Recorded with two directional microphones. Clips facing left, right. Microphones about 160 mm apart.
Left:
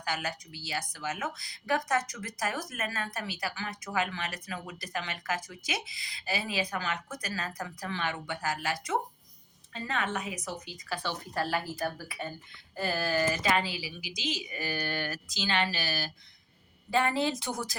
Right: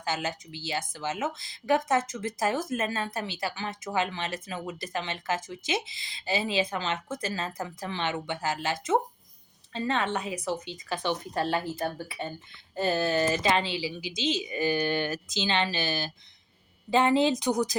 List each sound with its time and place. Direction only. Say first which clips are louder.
0.0 s speech: right 3 dB; 25° right (ahead or behind)